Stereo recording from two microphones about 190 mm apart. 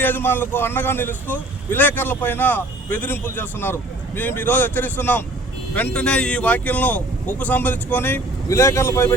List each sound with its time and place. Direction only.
0.0 s speech: 10° left (ahead or behind)